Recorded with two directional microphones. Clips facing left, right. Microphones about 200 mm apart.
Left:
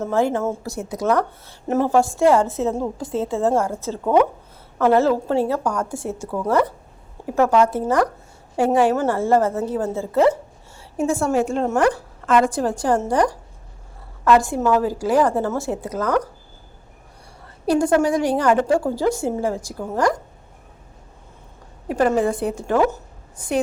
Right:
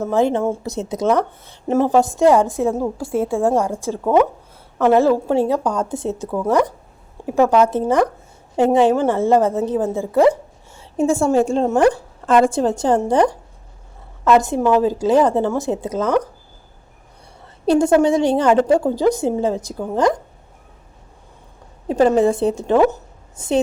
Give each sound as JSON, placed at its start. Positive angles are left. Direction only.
{"t": 0.0, "sound": "a woman's voice", "side_deg": -20}
{"t": 10.8, "sound": "a woman's voice", "side_deg": -25}
{"t": 17.7, "sound": "a woman's voice", "side_deg": -25}
{"t": 21.8, "sound": "a woman's voice", "side_deg": -25}